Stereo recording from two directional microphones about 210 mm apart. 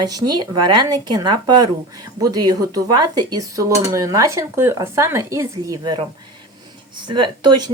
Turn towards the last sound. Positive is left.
turn(degrees=-20)  # may be behind; listen again after turning